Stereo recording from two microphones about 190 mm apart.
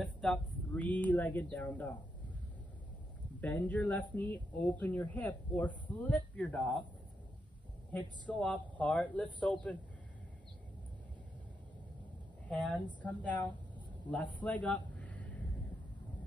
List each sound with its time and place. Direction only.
0.0 s speech: 5° left (ahead or behind)
3.3 s speech: 10° left (ahead or behind)
7.9 s speech: 5° left (ahead or behind)
12.4 s a man's voice: 5° left (ahead or behind)